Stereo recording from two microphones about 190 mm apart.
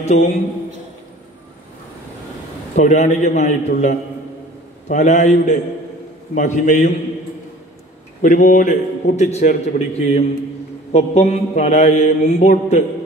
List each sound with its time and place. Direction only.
0.0 s a man's voice: 35° left (ahead or behind)
2.7 s a man's voice: 40° left (ahead or behind)
8.2 s a man's voice: 45° left (ahead or behind)